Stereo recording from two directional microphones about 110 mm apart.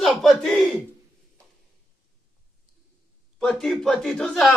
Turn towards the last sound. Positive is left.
turn(degrees=5)  # may be behind; listen again after turning